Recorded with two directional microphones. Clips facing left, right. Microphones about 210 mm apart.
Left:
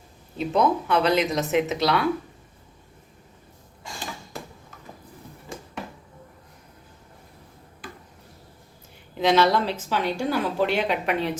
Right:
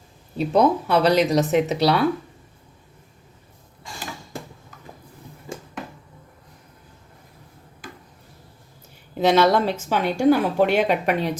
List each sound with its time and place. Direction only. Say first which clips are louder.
0.3 s speech: right 4 dB; 35° right (ahead or behind)
9.3 s a woman's voice: right 2 dB; 50° right (ahead or behind)